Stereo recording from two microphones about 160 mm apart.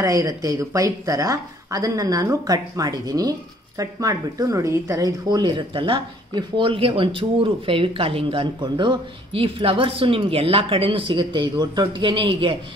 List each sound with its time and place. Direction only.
0.0 s speech: 20° right (ahead or behind)